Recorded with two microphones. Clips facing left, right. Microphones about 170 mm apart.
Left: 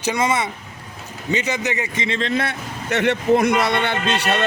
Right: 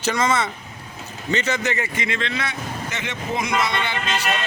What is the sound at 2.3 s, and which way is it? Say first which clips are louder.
A man's voice: left 5 dB; 55° left (ahead or behind).